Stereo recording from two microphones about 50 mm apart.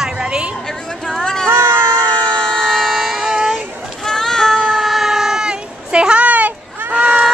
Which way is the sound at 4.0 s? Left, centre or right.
Centre.